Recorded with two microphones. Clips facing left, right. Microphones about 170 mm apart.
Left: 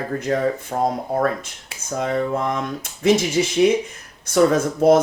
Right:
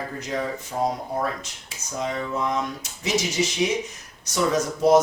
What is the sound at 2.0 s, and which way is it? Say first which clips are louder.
Speech: left 5 dB; 55° left (ahead or behind).